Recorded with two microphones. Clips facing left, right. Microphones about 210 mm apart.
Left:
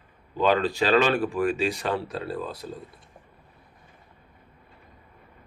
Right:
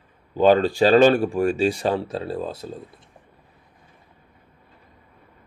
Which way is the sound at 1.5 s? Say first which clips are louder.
Right 5 dB; 30° right (ahead or behind).